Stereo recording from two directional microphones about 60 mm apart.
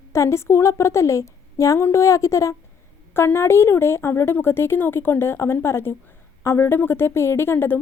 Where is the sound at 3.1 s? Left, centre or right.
Left.